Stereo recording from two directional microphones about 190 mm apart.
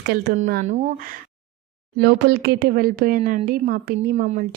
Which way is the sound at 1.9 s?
60° right (ahead or behind).